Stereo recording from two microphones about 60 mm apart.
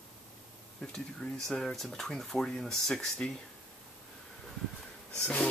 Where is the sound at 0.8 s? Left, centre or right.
Centre.